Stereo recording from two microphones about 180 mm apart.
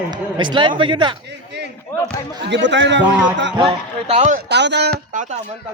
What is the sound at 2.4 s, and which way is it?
Speech, 80° right.